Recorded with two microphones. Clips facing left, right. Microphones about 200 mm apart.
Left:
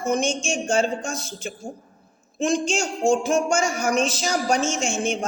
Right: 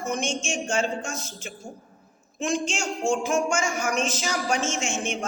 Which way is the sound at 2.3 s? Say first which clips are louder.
Left 5 dB; 35° left (ahead or behind).